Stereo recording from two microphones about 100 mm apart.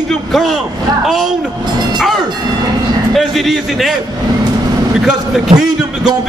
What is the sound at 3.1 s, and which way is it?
Speech, centre (ahead or behind).